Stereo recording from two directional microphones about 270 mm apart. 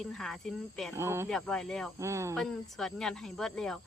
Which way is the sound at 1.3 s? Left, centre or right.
Centre.